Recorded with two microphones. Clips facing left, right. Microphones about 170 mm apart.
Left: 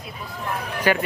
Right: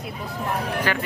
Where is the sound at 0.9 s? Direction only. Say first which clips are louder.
Left 8 dB; 10° left (ahead or behind).